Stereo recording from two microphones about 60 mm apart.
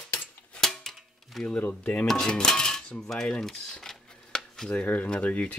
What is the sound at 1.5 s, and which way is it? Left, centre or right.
Speech, left.